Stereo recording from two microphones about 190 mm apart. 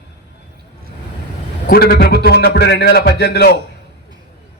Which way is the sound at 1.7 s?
55° left (ahead or behind).